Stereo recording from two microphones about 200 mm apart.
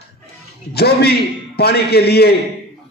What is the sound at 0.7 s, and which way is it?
A man's voice, 55° left (ahead or behind).